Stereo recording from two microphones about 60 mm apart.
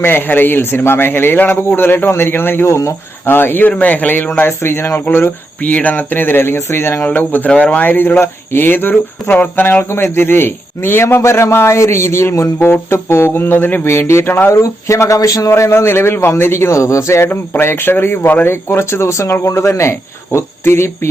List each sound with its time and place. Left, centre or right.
0.0 s speech: left
2.6 s speech: left
3.2 s speech: left
4.4 s speech: left
7.0 s speech: left
9.9 s speech: left
12.5 s speech: left
14.5 s a man's voice: left
17.2 s speech: left